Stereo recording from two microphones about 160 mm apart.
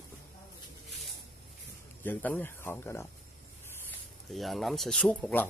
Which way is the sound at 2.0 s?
10° left (ahead or behind).